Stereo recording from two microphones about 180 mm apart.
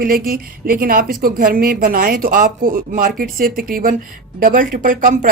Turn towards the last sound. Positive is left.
turn(degrees=-45)  # may be behind; listen again after turning